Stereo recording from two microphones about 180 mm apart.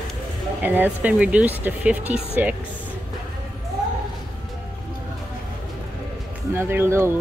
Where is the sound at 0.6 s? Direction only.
10° right (ahead or behind).